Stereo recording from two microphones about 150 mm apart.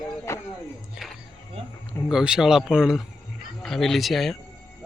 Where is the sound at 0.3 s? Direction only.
20° left (ahead or behind).